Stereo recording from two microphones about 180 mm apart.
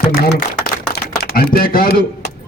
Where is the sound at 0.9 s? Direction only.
60° left (ahead or behind).